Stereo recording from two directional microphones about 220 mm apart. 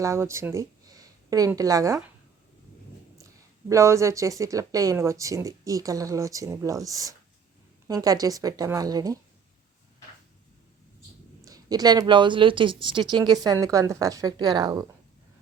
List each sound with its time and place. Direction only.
0.0 s speech: 15° right (ahead or behind)
3.7 s speech: 15° right (ahead or behind)
11.4 s speech: 15° right (ahead or behind)